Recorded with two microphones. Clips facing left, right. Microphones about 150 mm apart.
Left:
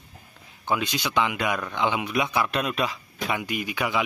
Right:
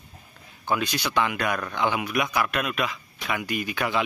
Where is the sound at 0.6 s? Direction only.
20° left (ahead or behind).